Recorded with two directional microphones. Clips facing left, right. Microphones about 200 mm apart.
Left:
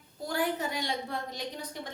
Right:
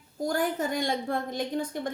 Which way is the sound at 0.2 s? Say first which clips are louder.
Right 4 dB; 45° right (ahead or behind).